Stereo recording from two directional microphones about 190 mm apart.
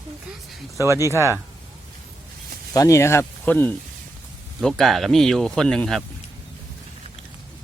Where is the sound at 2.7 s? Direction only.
15° left (ahead or behind).